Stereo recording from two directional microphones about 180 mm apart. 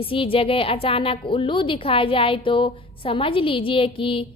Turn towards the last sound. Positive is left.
turn(degrees=30)  # may be behind; listen again after turning